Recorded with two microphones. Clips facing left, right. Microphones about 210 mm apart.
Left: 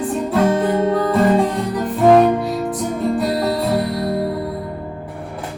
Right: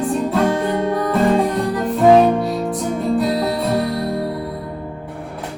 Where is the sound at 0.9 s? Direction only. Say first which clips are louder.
Left 2 dB; 25° left (ahead or behind).